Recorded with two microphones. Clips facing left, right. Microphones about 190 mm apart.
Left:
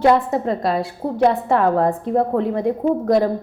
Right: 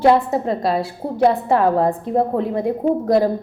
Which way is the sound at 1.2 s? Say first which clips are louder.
Right 1 dB; 35° right (ahead or behind).